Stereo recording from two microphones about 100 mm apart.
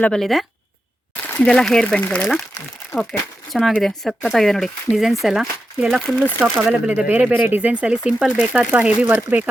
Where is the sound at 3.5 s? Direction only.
Centre (ahead or behind); by 9.5 s 15° right (ahead or behind).